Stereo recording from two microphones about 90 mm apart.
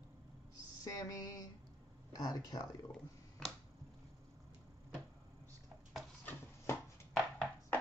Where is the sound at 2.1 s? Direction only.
45° left (ahead or behind).